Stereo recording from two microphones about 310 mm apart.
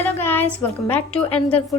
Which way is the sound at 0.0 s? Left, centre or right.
Centre.